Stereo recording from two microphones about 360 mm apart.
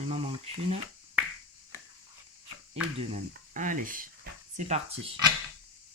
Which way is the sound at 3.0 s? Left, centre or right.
Centre.